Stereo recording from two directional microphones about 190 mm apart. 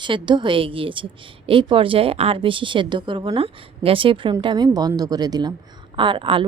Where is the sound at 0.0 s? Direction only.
25° right (ahead or behind).